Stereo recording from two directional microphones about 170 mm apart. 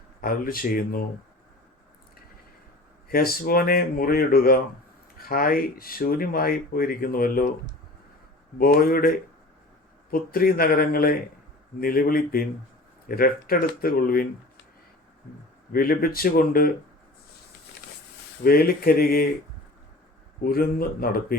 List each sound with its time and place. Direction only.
0.2 s speech: 55° left (ahead or behind)
3.1 s speech: 60° left (ahead or behind)
8.5 s speech: 60° left (ahead or behind)
15.7 s speech: 60° left (ahead or behind)
18.4 s speech: 60° left (ahead or behind)
20.4 s speech: 60° left (ahead or behind)